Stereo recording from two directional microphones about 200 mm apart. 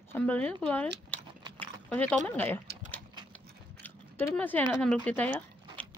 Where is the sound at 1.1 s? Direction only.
10° left (ahead or behind).